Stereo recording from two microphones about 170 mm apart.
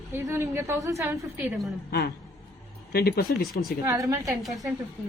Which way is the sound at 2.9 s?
65° left (ahead or behind).